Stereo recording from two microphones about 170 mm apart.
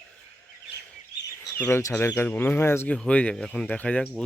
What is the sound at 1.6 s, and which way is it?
Speech, 15° left (ahead or behind).